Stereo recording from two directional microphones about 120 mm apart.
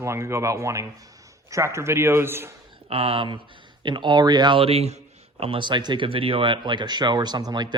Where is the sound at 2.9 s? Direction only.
55° right (ahead or behind); by 4.6 s 35° right (ahead or behind).